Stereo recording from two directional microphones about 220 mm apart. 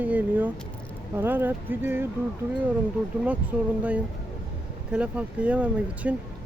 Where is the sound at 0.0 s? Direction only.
5° right (ahead or behind).